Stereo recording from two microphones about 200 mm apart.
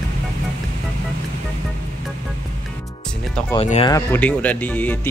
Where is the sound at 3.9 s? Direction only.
10° left (ahead or behind).